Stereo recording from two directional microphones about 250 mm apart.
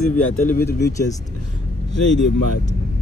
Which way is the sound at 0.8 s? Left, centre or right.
Centre.